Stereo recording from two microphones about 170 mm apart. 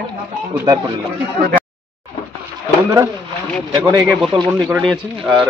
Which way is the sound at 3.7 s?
20° right (ahead or behind).